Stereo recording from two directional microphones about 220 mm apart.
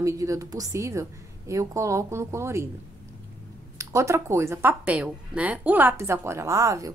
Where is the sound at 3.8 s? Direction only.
15° right (ahead or behind).